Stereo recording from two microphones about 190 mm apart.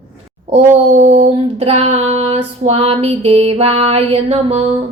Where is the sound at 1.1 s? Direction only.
30° right (ahead or behind).